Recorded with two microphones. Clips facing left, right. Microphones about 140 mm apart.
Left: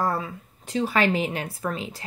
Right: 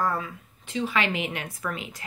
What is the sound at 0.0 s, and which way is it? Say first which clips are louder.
Speech: left 2 dB; 35° left (ahead or behind).